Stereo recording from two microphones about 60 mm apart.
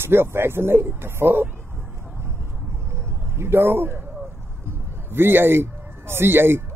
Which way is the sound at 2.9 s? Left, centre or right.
Right.